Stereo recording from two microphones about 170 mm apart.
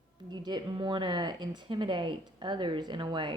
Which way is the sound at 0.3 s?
25° right (ahead or behind).